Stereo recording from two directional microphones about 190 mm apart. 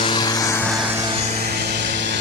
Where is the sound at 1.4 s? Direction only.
55° right (ahead or behind).